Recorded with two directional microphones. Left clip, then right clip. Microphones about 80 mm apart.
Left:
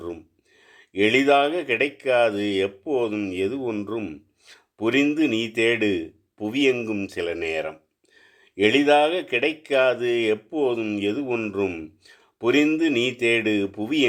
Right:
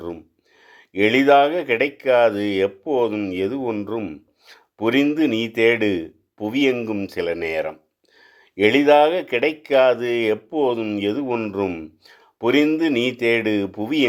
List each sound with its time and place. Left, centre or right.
0.6 s speech: right
7.2 s speech: right